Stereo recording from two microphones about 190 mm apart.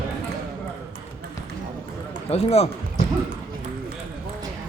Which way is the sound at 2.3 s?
35° left (ahead or behind).